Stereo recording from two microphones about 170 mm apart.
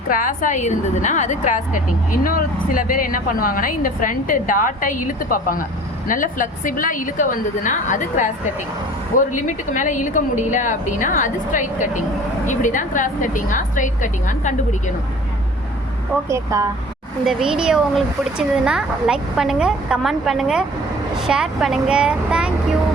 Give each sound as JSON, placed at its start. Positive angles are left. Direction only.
{"t": 0.1, "sound": "speech", "side_deg": 50}
{"t": 16.3, "sound": "speech", "side_deg": -20}
{"t": 17.2, "sound": "speech", "side_deg": -5}